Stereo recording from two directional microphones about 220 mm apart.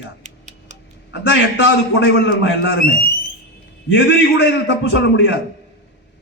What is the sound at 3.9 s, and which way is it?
A man's voice, 50° left (ahead or behind).